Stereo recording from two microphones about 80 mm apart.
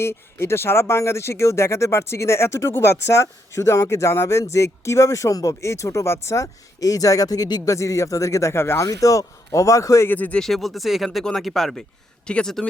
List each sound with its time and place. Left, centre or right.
0.0 s speech: left
8.8 s speech: left
10.1 s speech: centre
10.4 s speech: centre